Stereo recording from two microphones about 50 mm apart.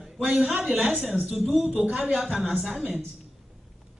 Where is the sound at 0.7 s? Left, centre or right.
Right.